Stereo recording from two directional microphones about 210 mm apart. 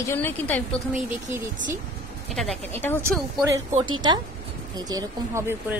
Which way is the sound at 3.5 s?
20° right (ahead or behind).